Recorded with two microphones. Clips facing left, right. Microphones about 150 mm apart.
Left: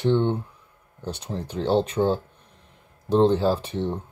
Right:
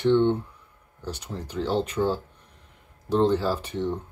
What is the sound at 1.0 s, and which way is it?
Speech, 25° left (ahead or behind).